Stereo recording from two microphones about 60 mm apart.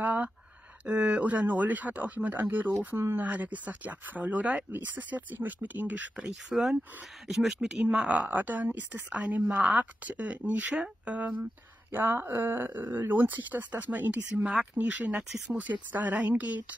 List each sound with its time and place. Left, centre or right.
0.0 s a sound: right
0.8 s speech: right
6.5 s speech: centre; by 11.3 s right
11.9 s speech: right